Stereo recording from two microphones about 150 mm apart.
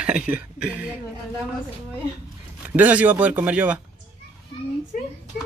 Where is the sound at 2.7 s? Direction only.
10° right (ahead or behind).